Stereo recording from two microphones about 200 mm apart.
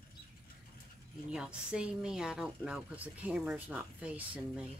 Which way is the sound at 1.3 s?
5° right (ahead or behind).